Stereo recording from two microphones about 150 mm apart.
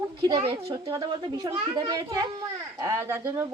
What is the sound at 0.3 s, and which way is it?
A woman's voice, 30° right (ahead or behind).